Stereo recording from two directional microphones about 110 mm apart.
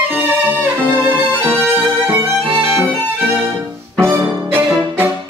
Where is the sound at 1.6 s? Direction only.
20° right (ahead or behind).